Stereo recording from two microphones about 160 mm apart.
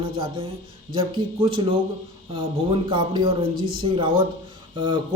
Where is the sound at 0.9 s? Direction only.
35° right (ahead or behind).